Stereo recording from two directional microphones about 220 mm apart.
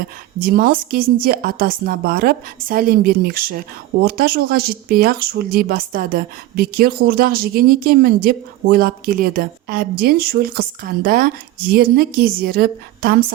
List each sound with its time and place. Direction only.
0.3 s a woman's voice: 40° right (ahead or behind)